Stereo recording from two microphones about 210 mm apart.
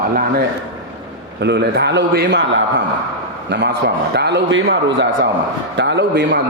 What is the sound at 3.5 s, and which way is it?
A man's voice, 55° right (ahead or behind).